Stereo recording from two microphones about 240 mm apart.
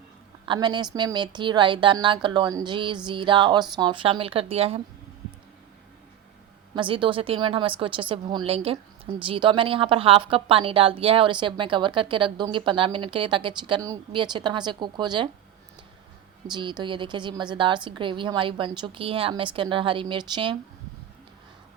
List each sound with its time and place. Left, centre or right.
0.4 s a woman's voice: centre
6.7 s a woman's voice: right
16.5 s a woman's voice: centre